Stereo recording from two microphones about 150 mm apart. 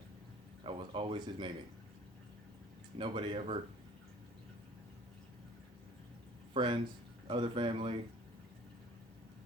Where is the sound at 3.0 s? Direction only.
35° right (ahead or behind).